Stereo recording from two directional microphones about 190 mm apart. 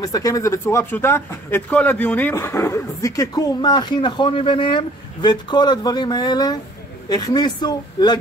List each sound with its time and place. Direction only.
0.0 s speech: 20° left (ahead or behind)